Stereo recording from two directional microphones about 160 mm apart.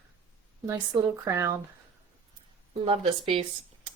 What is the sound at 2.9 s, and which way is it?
Speech, 35° right (ahead or behind).